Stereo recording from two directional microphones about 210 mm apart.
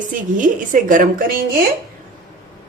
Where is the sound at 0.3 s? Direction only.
40° right (ahead or behind).